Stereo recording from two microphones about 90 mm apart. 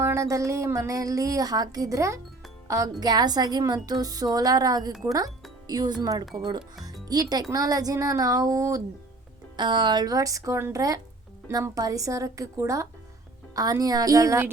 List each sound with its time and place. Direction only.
0.0 s a woman's voice: 35° right (ahead or behind)
3.0 s a woman's voice: 50° right (ahead or behind)
9.6 s a woman's voice: 60° right (ahead or behind); by 14.4 s 40° right (ahead or behind)